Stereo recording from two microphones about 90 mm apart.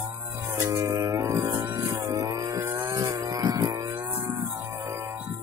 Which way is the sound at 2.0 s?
40° right (ahead or behind).